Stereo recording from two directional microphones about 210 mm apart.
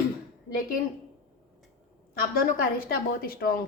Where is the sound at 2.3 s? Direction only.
45° left (ahead or behind).